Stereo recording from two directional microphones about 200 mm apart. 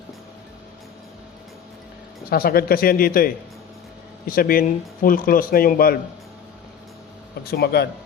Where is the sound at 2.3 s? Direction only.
50° left (ahead or behind).